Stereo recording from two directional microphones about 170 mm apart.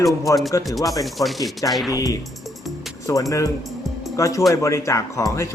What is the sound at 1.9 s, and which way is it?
Speech, 20° left (ahead or behind).